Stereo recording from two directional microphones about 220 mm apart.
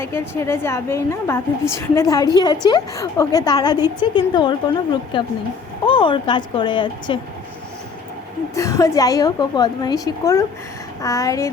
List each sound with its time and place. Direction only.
0.0 s a woman's voice: 10° left (ahead or behind)
8.5 s a woman's voice: 15° left (ahead or behind)